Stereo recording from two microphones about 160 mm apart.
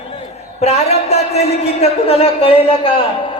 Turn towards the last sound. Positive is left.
turn(degrees=35)  # may be behind; listen again after turning